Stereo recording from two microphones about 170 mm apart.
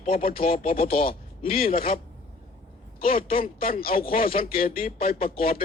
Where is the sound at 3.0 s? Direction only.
35° left (ahead or behind).